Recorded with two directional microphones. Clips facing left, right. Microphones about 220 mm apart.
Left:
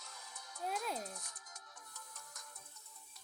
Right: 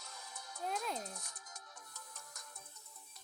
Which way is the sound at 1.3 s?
45° right (ahead or behind).